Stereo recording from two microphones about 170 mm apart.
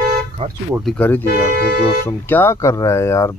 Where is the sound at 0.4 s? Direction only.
35° right (ahead or behind).